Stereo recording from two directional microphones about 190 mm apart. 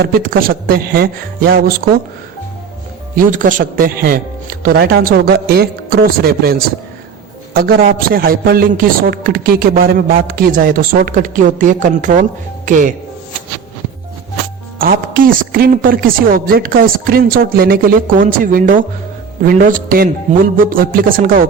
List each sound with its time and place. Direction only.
0.0 s a man's voice: 50° right (ahead or behind)
3.2 s a man's voice: 45° right (ahead or behind)
14.8 s a man's voice: 50° right (ahead or behind)